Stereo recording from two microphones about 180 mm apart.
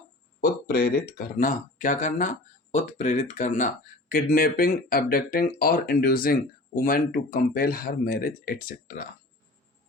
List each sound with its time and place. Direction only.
0.4 s speech: 60° left (ahead or behind)